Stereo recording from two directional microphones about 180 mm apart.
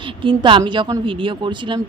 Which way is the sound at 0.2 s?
25° right (ahead or behind).